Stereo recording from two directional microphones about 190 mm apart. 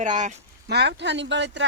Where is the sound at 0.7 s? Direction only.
60° right (ahead or behind).